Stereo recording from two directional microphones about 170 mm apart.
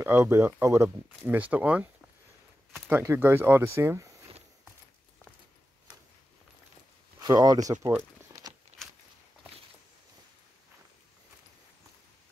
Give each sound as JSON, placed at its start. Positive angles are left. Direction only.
{"t": 0.0, "sound": "speech", "side_deg": -15}
{"t": 2.9, "sound": "speech", "side_deg": -15}
{"t": 7.2, "sound": "speech", "side_deg": -20}
{"t": 7.7, "sound": "crumpling", "side_deg": -15}